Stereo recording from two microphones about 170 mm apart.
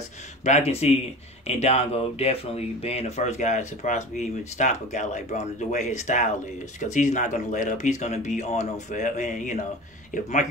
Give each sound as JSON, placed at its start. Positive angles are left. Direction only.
{"t": 0.5, "sound": "speech", "side_deg": 40}